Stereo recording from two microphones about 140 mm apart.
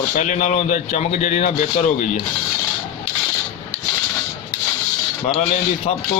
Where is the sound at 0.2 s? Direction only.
60° left (ahead or behind).